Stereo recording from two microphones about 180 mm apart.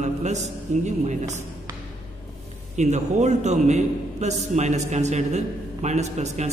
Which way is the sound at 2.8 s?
40° right (ahead or behind).